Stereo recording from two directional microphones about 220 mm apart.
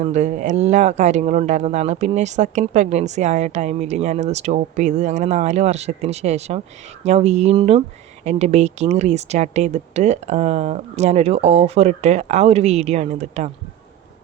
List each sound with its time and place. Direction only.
0.0 s speech: 30° right (ahead or behind)